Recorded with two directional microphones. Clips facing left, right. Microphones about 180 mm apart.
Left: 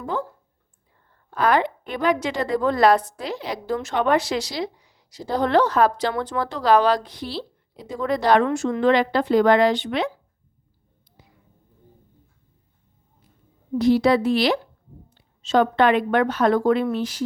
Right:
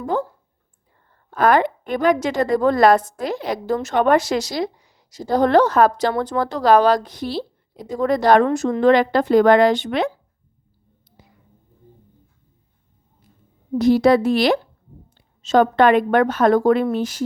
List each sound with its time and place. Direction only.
0.0 s speech: 40° right (ahead or behind)
1.4 s a woman's voice: 50° right (ahead or behind)
13.7 s a woman's voice: 45° right (ahead or behind)